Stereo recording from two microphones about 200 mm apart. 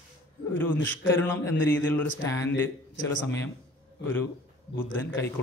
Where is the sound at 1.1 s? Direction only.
10° left (ahead or behind).